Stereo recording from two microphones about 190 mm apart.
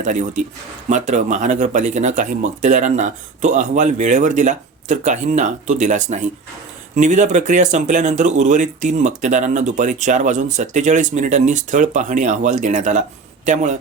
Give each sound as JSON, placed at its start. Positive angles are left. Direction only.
{"t": 0.0, "sound": "speech", "side_deg": -40}